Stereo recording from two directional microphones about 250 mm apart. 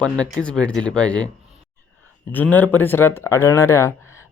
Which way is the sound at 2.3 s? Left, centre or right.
Centre.